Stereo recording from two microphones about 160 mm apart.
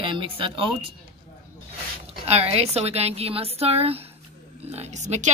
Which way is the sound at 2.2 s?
40° right (ahead or behind).